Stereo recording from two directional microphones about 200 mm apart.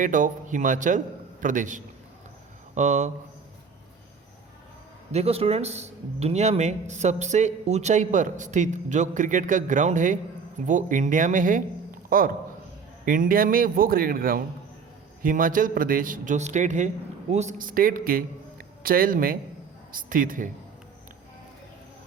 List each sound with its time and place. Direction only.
0.0 s a man's voice: 40° right (ahead or behind)
5.1 s a man's voice: 30° right (ahead or behind)